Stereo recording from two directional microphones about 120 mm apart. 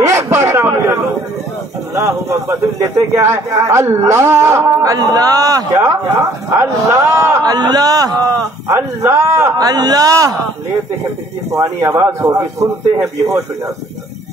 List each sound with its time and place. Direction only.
0.0 s a sound: 20° right (ahead or behind)
2.0 s a man's voice: 25° right (ahead or behind)
8.6 s a man's voice: 20° right (ahead or behind)
11.5 s a man's voice: 25° right (ahead or behind)